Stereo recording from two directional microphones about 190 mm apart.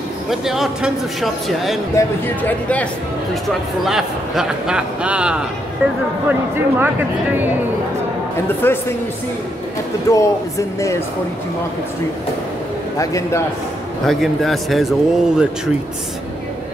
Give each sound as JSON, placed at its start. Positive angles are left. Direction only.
{"t": 0.3, "sound": "a man's voice", "side_deg": 0}
{"t": 2.0, "sound": "speech", "side_deg": 10}
{"t": 3.4, "sound": "a man's voice", "side_deg": 0}
{"t": 8.6, "sound": "speech", "side_deg": 10}
{"t": 10.1, "sound": "speech", "side_deg": 15}
{"t": 12.9, "sound": "speech", "side_deg": 15}
{"t": 14.0, "sound": "a man's voice", "side_deg": 0}